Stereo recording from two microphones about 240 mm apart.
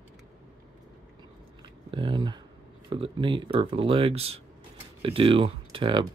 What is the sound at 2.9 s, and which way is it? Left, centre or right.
Speech, right.